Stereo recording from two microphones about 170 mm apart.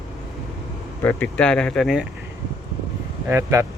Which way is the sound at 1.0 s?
10° left (ahead or behind).